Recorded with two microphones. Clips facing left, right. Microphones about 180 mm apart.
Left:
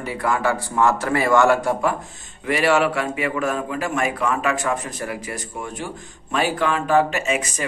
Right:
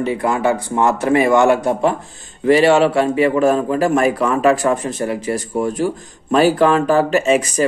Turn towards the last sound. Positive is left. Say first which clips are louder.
# right 9 dB
turn(degrees=-35)  # may be behind; listen again after turning